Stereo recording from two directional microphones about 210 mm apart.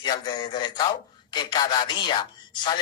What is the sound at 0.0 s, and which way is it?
Speech, 20° left (ahead or behind).